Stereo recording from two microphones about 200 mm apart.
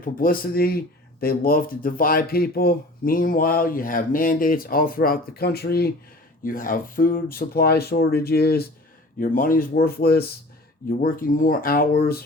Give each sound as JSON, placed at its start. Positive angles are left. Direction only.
{"t": 0.0, "sound": "speech", "side_deg": 45}